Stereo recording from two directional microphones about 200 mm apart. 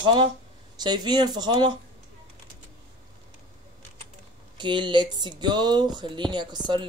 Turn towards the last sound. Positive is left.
turn(degrees=-20)  # may be behind; listen again after turning